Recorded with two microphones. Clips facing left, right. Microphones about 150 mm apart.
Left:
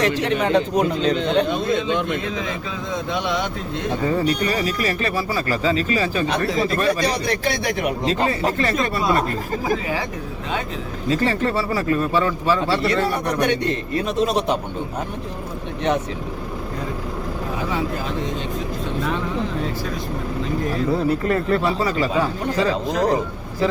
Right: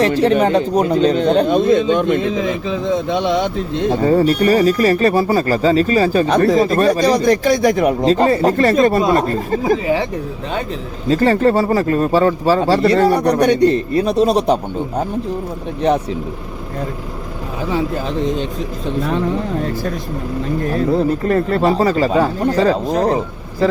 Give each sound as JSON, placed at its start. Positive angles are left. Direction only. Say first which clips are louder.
{"t": 0.0, "sound": "speech", "louder": "right 7 dB", "side_deg": -35}
{"t": 2.3, "sound": "speech", "louder": "right 8 dB", "side_deg": -25}
{"t": 3.8, "sound": "speech", "louder": "right 7 dB", "side_deg": -35}
{"t": 11.1, "sound": "speech", "louder": "right 7 dB", "side_deg": -40}
{"t": 21.2, "sound": "speech", "louder": "right 5 dB", "side_deg": -40}